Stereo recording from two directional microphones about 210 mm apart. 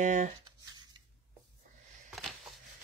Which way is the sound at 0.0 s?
35° right (ahead or behind).